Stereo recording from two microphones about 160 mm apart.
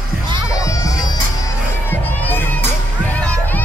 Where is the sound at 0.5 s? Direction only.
20° left (ahead or behind).